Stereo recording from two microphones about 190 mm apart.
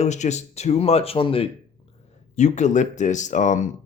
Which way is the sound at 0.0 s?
35° left (ahead or behind).